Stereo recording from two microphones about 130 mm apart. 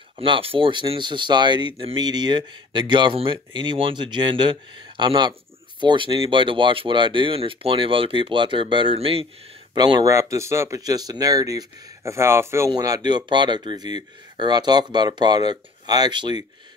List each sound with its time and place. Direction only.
0.2 s speech: 45° right (ahead or behind)
9.8 s speech: 30° right (ahead or behind)